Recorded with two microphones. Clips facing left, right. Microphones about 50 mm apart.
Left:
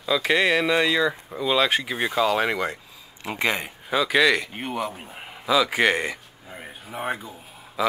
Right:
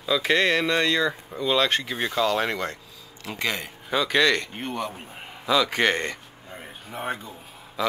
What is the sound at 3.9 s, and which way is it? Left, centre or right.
A man's voice, centre.